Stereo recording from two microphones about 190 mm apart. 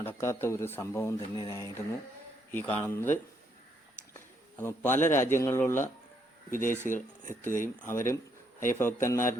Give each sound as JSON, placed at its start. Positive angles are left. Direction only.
{"t": 0.0, "sound": "speech", "side_deg": 10}
{"t": 6.8, "sound": "speech", "side_deg": 45}
{"t": 7.2, "sound": "speech", "side_deg": 15}